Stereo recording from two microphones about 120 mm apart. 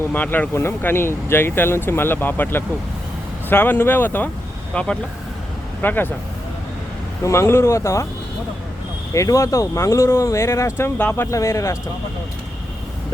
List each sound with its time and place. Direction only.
0.1 s speech: 15° left (ahead or behind)
7.2 s speech: 25° left (ahead or behind)
9.1 s speech: 25° left (ahead or behind)